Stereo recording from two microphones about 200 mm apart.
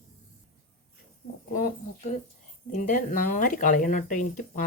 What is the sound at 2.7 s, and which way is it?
Speech, 40° left (ahead or behind).